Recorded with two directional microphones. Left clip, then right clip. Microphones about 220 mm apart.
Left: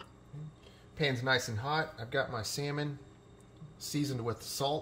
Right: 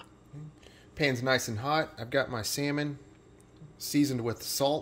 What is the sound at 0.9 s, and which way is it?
Speech, 45° right (ahead or behind).